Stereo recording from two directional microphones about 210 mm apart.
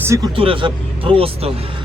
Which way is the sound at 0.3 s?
25° right (ahead or behind).